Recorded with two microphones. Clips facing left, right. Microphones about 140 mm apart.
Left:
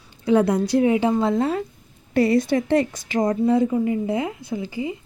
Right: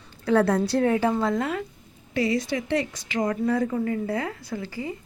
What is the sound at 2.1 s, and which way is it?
A woman's voice, 55° left (ahead or behind).